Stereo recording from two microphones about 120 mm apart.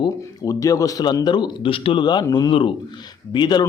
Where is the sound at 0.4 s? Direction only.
30° left (ahead or behind).